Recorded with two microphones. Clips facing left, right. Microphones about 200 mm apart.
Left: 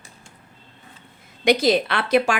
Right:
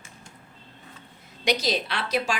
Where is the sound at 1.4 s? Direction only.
55° left (ahead or behind).